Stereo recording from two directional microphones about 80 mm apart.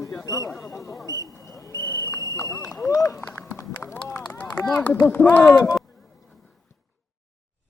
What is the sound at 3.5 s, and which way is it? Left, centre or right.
Clip-clop, left.